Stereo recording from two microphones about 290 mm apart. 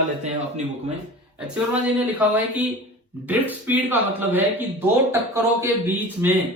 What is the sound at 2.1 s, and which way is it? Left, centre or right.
A man's voice, centre.